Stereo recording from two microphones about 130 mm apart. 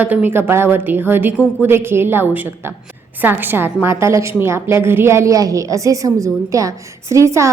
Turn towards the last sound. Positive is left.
turn(degrees=-20)  # may be behind; listen again after turning